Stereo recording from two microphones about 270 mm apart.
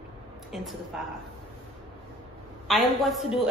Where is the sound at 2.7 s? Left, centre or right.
Centre.